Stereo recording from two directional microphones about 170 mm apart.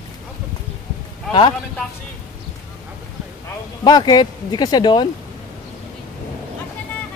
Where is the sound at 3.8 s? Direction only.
25° left (ahead or behind).